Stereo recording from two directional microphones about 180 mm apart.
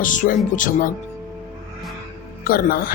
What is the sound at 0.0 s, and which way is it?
Speech, 45° left (ahead or behind).